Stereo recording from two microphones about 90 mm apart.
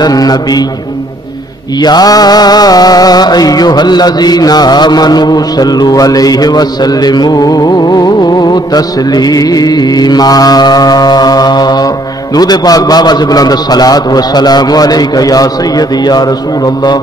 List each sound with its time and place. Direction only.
0.0 s music: 45° left (ahead or behind)
1.8 s music: 50° left (ahead or behind)